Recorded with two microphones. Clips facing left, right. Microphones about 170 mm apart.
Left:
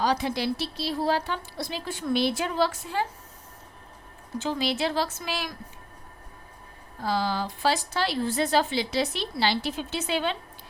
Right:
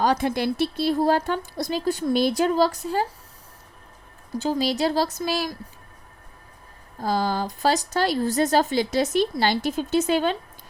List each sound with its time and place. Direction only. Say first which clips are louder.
0.0 s speech: right 4 dB; 50° right (ahead or behind)
4.4 s speech: right 4 dB; 40° right (ahead or behind)
7.0 s speech: right 3 dB; 45° right (ahead or behind)